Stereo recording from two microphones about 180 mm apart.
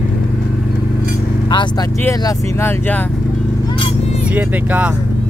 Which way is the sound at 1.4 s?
25° left (ahead or behind).